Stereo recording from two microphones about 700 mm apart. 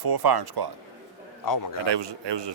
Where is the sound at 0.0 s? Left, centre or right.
Right.